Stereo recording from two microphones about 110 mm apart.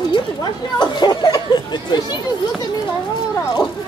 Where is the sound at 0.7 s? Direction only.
40° left (ahead or behind).